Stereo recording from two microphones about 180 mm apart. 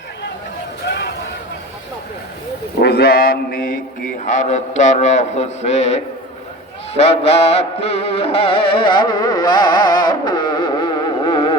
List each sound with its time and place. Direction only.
0.9 s a sound: 65° left (ahead or behind)
2.8 s mantra: 60° left (ahead or behind)
4.3 s a man's voice: 45° left (ahead or behind)
6.9 s music: 35° left (ahead or behind)